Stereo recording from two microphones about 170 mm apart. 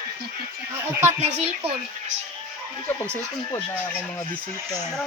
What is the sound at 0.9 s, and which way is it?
Speech, 15° right (ahead or behind).